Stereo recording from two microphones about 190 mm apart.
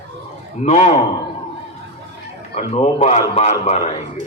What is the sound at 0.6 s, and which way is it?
Speech, 35° left (ahead or behind).